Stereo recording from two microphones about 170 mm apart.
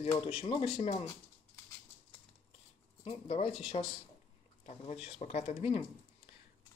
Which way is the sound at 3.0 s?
35° left (ahead or behind).